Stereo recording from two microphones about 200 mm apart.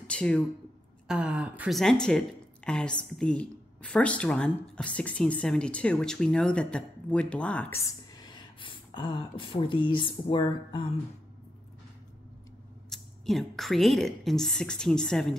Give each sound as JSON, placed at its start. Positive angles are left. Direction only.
{"t": 0.0, "sound": "a woman's voice", "side_deg": 5}
{"t": 8.1, "sound": "speech", "side_deg": 20}
{"t": 12.9, "sound": "a woman's voice", "side_deg": 0}